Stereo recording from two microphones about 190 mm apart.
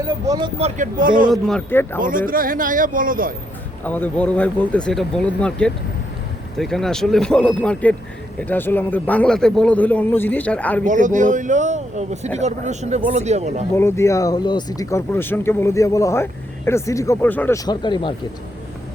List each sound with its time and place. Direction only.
0.0 s speech: 20° right (ahead or behind)
0.6 s speech: 45° right (ahead or behind)
1.3 s speech: 5° left (ahead or behind)
2.0 s speech: 45° right (ahead or behind)
3.8 s speech: 10° left (ahead or behind)
10.8 s speech: 40° right (ahead or behind)
13.7 s speech: 15° left (ahead or behind)
17.7 s speech: 25° left (ahead or behind)